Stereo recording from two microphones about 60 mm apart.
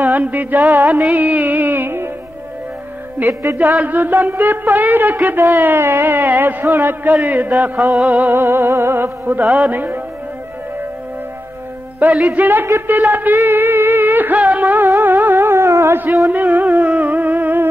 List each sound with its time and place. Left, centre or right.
0.0 s music: right
3.2 s music: right
7.2 s music: right
12.0 s music: right
16.3 s music: right